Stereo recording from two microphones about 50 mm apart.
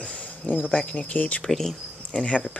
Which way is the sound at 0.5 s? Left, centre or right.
Left.